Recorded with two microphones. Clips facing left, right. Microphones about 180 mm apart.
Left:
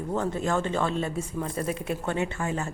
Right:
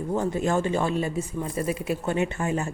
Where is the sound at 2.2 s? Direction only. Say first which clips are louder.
Right 3 dB; 15° right (ahead or behind).